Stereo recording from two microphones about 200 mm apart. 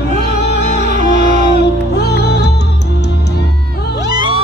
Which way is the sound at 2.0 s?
55° left (ahead or behind).